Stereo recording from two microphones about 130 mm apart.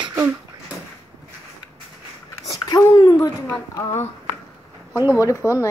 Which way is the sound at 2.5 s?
25° left (ahead or behind).